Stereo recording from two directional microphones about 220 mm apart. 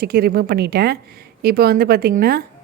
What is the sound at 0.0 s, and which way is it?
A woman's voice, 45° right (ahead or behind).